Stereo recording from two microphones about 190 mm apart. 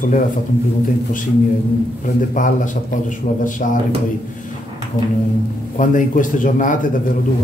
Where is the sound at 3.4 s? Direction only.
45° left (ahead or behind).